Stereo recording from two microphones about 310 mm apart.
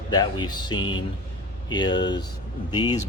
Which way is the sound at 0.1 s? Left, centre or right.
Centre.